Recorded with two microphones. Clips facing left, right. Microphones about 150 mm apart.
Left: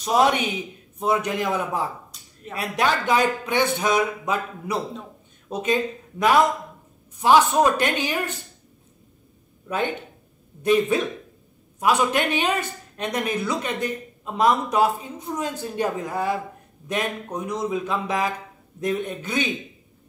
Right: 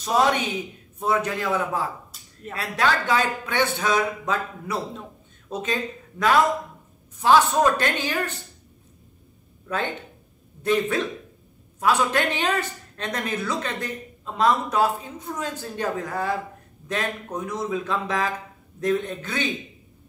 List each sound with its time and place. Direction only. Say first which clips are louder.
0.0 s speech: left 2 dB; 10° left (ahead or behind)
2.1 s a sound: even; 5° right (ahead or behind)
2.5 s speech: left 1 dB; 15° left (ahead or behind)
10.6 s speech: left 3 dB; 15° left (ahead or behind)